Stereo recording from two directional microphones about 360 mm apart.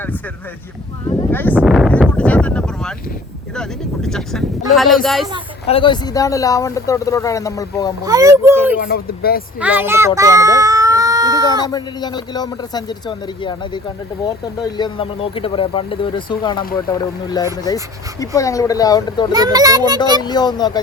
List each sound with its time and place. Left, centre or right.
1.3 s speech: centre
5.6 s speech: centre
8.0 s a child's voice: centre
8.8 s speech: left
9.6 s speech: centre
10.2 s a sound: centre
11.6 s speech: centre
19.3 s a child's voice: centre
20.2 s speech: centre